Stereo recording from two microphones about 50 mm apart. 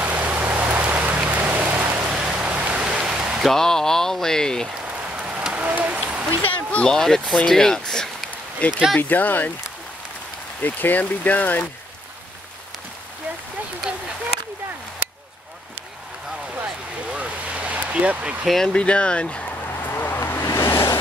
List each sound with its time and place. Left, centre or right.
0.0 s rain: right
2.0 s vehicle: right
2.7 s a sound: centre
3.4 s speech: centre
5.2 s a sound: right
6.8 s speech: centre
8.5 s speech: left
10.6 s speech: left
16.6 s a sound: right
18.7 s speech: left
19.8 s vehicle: left
20.2 s vehicle: left
20.4 s vehicle: left